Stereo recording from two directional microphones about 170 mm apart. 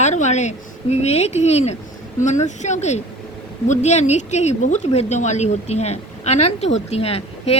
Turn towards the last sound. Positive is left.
turn(degrees=35)  # may be behind; listen again after turning